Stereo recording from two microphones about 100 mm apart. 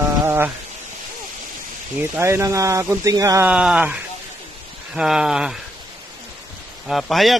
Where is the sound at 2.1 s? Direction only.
25° right (ahead or behind).